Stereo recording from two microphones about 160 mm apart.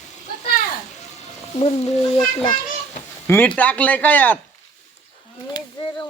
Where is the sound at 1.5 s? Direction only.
40° left (ahead or behind).